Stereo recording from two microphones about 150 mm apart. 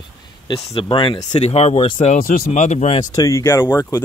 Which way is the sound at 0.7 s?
35° left (ahead or behind).